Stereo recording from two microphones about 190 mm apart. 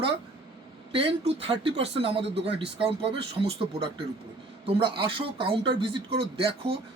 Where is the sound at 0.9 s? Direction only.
30° right (ahead or behind).